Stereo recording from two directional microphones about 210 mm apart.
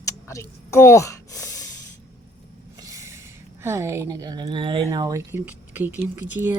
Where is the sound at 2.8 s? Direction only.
15° right (ahead or behind).